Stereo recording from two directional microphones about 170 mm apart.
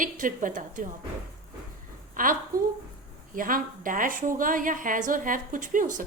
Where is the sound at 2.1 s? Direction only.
55° right (ahead or behind).